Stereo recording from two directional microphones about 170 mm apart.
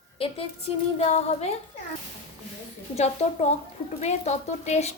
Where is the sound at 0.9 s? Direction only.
40° left (ahead or behind).